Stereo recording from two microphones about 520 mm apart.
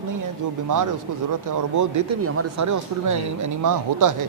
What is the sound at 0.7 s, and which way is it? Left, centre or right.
Speech, right.